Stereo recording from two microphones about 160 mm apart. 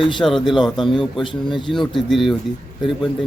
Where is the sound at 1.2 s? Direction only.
30° left (ahead or behind).